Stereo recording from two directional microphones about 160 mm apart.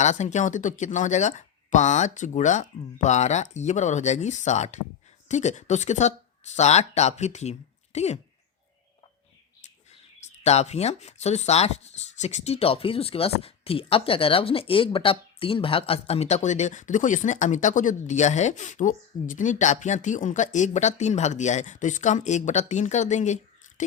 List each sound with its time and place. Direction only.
0.0 s speech: 50° left (ahead or behind)
10.2 s speech: 40° left (ahead or behind)